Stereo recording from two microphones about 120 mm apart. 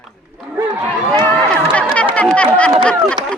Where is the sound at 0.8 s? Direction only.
15° left (ahead or behind).